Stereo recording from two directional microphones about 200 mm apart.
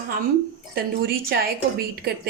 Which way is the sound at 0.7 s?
50° right (ahead or behind).